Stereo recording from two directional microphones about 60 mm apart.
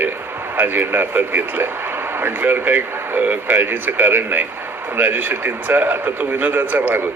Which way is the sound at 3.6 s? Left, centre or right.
Right.